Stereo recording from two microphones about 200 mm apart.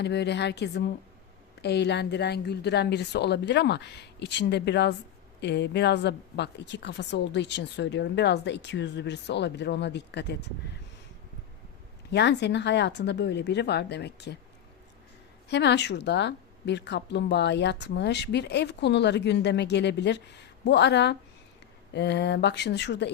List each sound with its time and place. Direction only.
0.0 s a woman's voice: 55° left (ahead or behind)
12.1 s a woman's voice: 60° left (ahead or behind)
15.4 s a woman's voice: 60° left (ahead or behind)